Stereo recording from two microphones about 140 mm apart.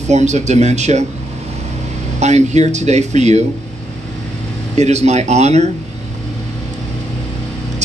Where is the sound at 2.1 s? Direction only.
55° right (ahead or behind).